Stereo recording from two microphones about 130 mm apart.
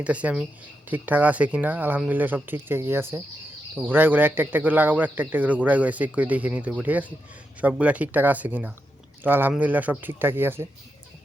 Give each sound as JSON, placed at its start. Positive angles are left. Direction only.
{"t": 0.0, "sound": "speech", "side_deg": -10}